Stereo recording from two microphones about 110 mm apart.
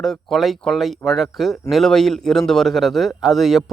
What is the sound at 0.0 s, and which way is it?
Speech, 5° left (ahead or behind).